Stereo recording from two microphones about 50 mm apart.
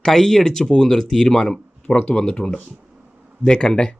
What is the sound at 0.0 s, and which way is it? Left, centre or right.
Speech, centre.